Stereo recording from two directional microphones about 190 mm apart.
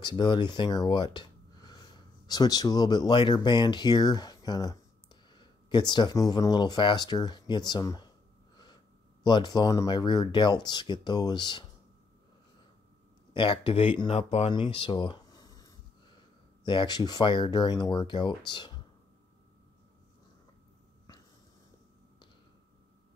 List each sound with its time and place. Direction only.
0.0 s speech: 25° left (ahead or behind)
9.2 s speech: 20° left (ahead or behind)
13.3 s speech: 25° left (ahead or behind)
16.6 s speech: 25° left (ahead or behind)